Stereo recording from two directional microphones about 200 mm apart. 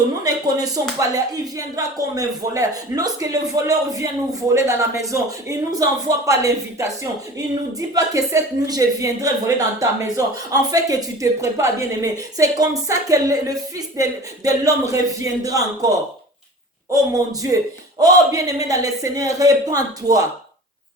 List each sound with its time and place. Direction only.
0.3 s speech: 20° right (ahead or behind)